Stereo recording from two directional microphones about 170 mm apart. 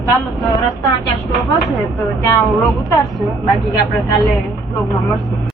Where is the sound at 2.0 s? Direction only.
20° left (ahead or behind).